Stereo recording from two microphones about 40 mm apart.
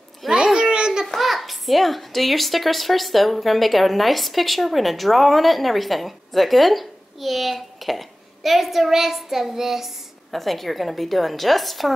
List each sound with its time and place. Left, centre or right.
0.3 s a sound: centre
1.0 s a child's voice: centre
10.3 s a child's voice: centre